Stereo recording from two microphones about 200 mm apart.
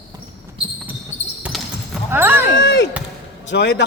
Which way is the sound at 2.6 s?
55° left (ahead or behind).